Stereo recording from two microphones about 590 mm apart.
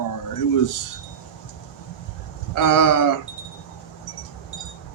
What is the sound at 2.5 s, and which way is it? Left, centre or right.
Speech, left.